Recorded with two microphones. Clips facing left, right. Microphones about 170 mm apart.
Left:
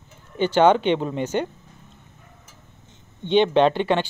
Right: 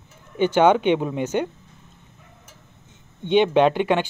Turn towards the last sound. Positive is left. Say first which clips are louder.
# right 1 dB
turn(degrees=-10)  # may be behind; listen again after turning